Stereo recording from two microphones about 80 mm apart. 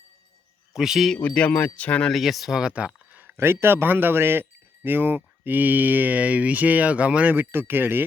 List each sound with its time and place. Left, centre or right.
0.7 s a man's voice: centre
1.2 s speech: left
2.1 s speech: centre
3.3 s speech: right
7.5 s speech: right